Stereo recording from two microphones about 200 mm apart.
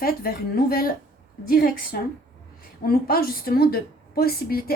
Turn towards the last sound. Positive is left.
turn(degrees=50)  # may be behind; listen again after turning